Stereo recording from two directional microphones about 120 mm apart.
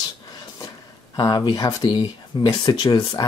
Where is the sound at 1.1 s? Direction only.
35° left (ahead or behind).